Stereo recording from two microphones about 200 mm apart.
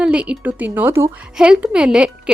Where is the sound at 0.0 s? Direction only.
5° right (ahead or behind).